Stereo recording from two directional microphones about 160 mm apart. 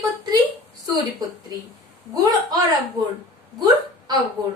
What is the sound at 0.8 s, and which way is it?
Speech, 25° right (ahead or behind).